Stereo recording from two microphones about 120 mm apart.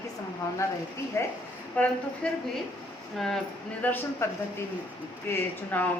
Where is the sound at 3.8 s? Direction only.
15° left (ahead or behind).